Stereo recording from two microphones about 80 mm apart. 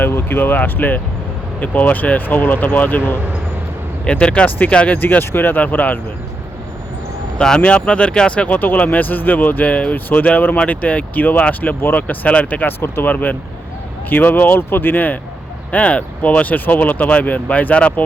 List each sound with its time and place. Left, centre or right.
0.0 s speech: left
4.0 s speech: centre
4.9 s speech: left
7.3 s speech: centre